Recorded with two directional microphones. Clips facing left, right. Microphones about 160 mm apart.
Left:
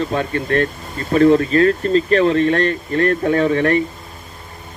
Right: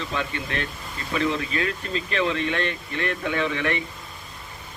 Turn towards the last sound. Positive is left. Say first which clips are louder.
# left 10 dB
turn(degrees=45)  # may be behind; listen again after turning